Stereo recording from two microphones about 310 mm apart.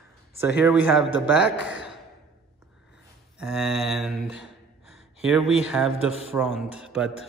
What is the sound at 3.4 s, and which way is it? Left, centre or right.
Mantra, centre.